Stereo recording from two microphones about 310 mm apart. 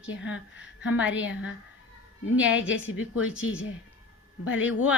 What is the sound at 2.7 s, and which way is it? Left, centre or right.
Speech, left.